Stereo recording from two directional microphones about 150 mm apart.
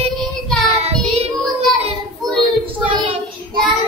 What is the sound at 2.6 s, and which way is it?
Speech, 35° right (ahead or behind).